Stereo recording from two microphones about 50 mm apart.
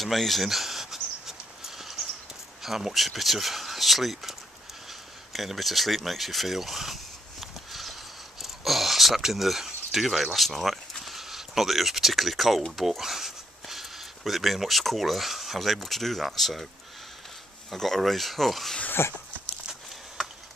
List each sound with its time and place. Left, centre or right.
0.0 s a sound: centre
2.6 s speech: centre
5.3 s a sound: centre
12.7 s speech: centre
17.7 s speech: centre
18.9 s dog: left